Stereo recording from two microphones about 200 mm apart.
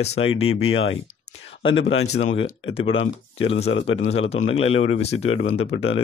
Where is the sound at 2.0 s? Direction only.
35° left (ahead or behind).